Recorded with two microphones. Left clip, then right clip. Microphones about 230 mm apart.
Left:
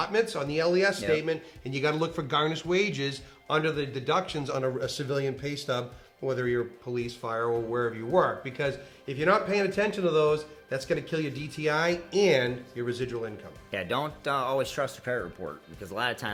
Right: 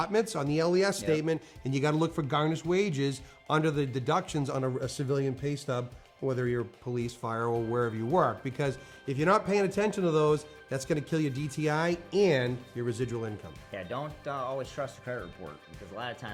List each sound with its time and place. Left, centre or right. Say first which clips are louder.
0.0 s speech: left 2 dB; right
13.7 s speech: left 7 dB; centre